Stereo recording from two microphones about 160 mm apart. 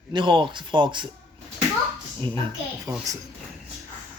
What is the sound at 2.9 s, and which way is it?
Speech, 20° right (ahead or behind).